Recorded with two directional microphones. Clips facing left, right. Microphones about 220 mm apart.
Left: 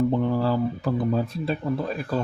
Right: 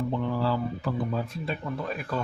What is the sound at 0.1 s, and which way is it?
Speech, 40° left (ahead or behind).